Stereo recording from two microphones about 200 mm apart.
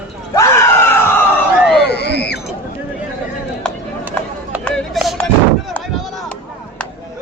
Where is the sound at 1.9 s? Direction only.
55° left (ahead or behind).